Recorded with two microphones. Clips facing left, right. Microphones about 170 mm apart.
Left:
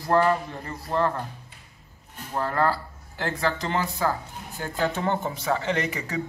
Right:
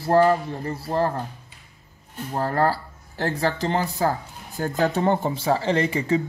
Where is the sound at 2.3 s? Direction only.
35° right (ahead or behind).